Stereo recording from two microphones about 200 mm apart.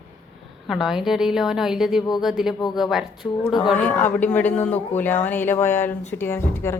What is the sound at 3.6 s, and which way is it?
Speech, 10° left (ahead or behind).